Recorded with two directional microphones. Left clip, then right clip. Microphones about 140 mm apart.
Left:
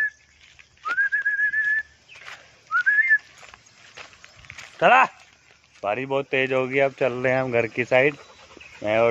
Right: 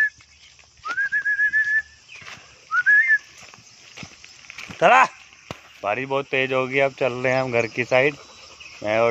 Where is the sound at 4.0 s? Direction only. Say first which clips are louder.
Right 2 dB; 15° left (ahead or behind).